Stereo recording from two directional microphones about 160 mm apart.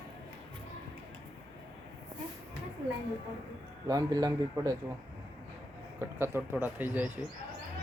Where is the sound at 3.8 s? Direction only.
25° right (ahead or behind).